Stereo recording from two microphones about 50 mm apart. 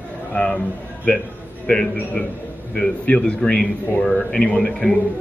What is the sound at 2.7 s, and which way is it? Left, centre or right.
A man's voice, left.